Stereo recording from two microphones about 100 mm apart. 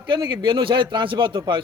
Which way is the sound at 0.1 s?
50° right (ahead or behind).